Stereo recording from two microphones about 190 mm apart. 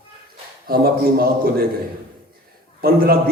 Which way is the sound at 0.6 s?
50° right (ahead or behind).